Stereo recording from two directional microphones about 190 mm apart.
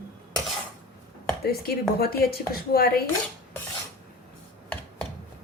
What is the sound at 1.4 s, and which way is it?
A woman's voice, 55° left (ahead or behind).